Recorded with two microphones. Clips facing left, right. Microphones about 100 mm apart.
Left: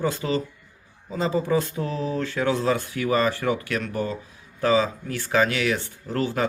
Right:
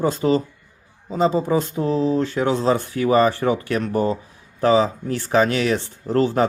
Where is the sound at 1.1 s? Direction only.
20° right (ahead or behind).